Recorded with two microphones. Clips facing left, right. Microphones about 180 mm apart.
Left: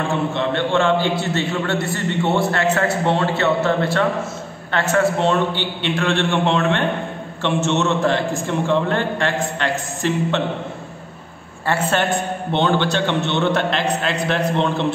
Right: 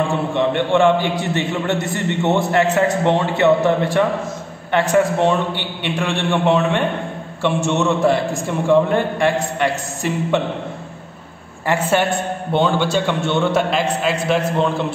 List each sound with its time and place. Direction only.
0.3 s a man's voice: 15° right (ahead or behind)
11.6 s a man's voice: 15° right (ahead or behind)